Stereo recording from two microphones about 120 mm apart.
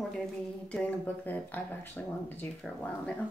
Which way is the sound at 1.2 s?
15° left (ahead or behind).